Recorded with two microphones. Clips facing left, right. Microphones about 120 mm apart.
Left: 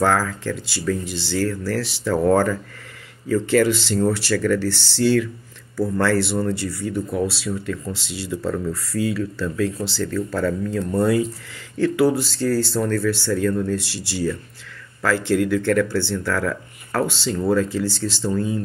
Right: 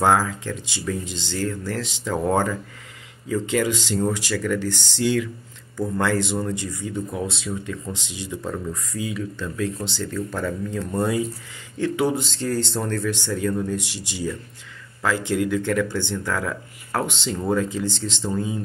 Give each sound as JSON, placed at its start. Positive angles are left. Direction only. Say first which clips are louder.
{"t": 0.0, "sound": "speech", "louder": "even", "side_deg": -20}